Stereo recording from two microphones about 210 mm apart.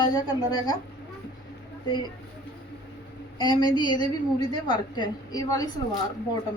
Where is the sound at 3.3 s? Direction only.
20° left (ahead or behind).